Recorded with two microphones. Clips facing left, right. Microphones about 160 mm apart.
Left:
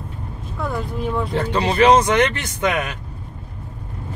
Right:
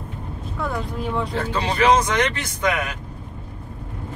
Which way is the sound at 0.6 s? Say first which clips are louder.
Left 2 dB; centre (ahead or behind).